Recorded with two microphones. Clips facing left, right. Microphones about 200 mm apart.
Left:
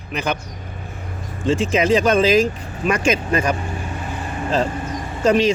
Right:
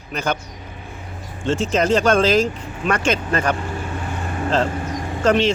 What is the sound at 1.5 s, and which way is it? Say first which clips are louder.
Speech: left 1 dB; 10° left (ahead or behind).